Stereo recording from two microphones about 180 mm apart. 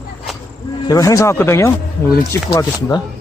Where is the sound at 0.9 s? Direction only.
20° left (ahead or behind).